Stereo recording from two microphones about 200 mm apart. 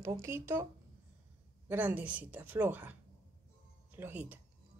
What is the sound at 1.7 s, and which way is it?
A woman's voice, 5° right (ahead or behind).